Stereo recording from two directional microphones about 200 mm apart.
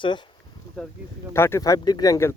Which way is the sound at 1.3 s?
15° left (ahead or behind).